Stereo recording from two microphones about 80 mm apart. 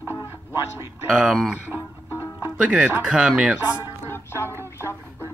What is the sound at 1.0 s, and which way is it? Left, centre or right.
Speech, centre.